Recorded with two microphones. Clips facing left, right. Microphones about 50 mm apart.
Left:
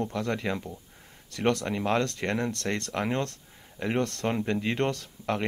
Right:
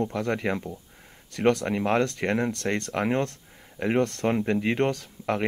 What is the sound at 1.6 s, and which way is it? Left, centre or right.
Speech, right.